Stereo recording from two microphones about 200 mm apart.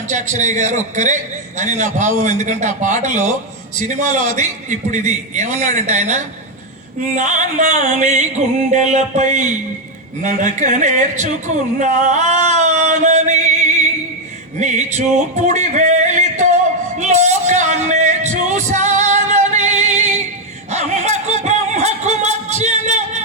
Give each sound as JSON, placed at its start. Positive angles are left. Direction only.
{"t": 0.1, "sound": "speech", "side_deg": -35}
{"t": 14.6, "sound": "music", "side_deg": -35}